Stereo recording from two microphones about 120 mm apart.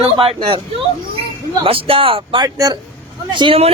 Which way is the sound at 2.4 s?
35° right (ahead or behind).